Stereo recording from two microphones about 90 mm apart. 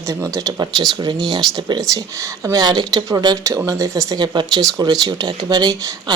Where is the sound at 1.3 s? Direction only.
55° right (ahead or behind).